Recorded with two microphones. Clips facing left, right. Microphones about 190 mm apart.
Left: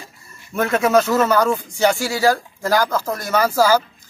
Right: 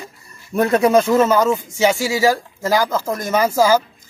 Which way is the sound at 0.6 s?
30° right (ahead or behind).